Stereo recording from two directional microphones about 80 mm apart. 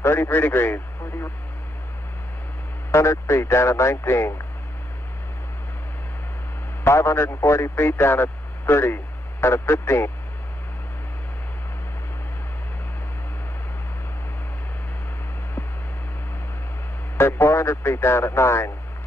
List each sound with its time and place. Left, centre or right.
0.0 s a man's voice: left
2.9 s speech: left
6.8 s a man's voice: left
17.2 s speech: left